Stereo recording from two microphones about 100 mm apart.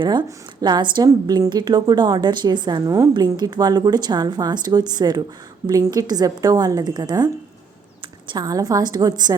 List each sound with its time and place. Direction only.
0.0 s speech: 50° right (ahead or behind); by 3.2 s 35° right (ahead or behind)
3.3 s a woman's voice: 45° right (ahead or behind)